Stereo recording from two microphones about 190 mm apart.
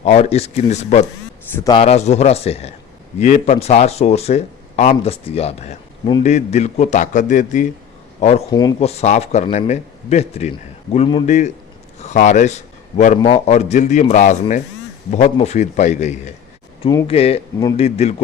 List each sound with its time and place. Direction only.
0.0 s speech: 35° left (ahead or behind)
8.4 s speech: 20° left (ahead or behind)
8.8 s speech: 35° left (ahead or behind)